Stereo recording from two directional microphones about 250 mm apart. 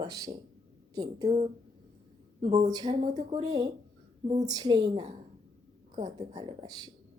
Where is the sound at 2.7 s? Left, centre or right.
Centre.